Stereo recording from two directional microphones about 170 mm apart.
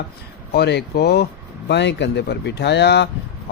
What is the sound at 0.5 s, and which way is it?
Speech, 75° left (ahead or behind).